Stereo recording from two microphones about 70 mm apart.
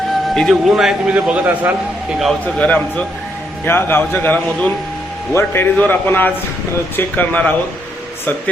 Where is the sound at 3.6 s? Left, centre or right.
Left.